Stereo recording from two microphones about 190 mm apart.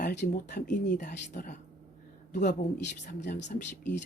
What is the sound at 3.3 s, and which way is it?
Speech, 55° left (ahead or behind).